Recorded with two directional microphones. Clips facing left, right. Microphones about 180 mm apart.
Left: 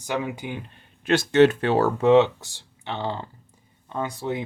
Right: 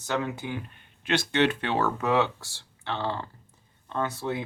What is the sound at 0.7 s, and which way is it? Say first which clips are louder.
Speech: left 7 dB; 45° left (ahead or behind).